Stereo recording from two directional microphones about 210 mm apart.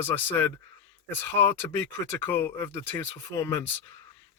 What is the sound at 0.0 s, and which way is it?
Speech, 10° left (ahead or behind).